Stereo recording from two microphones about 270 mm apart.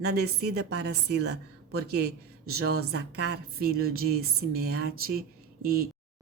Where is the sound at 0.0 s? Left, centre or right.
Right.